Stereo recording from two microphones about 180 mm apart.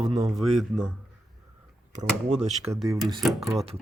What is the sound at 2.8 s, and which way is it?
Speech, centre (ahead or behind).